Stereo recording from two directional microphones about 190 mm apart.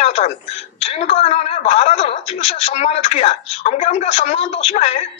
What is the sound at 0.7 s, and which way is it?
Speech, 30° left (ahead or behind).